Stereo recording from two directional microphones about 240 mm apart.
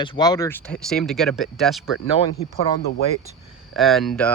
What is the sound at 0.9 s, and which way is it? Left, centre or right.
Speech, centre.